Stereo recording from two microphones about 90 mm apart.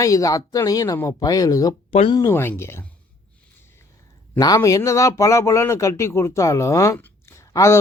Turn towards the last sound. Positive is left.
turn(degrees=35)  # may be behind; listen again after turning